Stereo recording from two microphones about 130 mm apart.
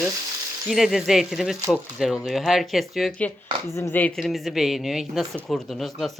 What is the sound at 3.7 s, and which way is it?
Speech, 20° left (ahead or behind).